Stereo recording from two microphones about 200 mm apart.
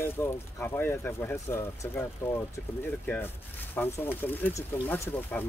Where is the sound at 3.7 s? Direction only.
10° left (ahead or behind).